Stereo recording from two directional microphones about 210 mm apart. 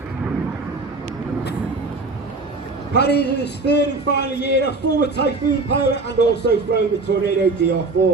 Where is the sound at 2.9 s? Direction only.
50° left (ahead or behind).